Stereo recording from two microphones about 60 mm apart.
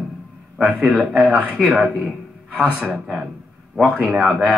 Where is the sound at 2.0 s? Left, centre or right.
Right.